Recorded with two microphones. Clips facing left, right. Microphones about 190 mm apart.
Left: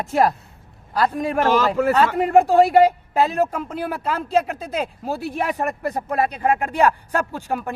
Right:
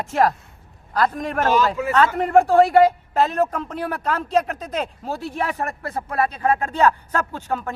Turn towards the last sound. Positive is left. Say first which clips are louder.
# left 1 dB
turn(degrees=10)  # may be behind; listen again after turning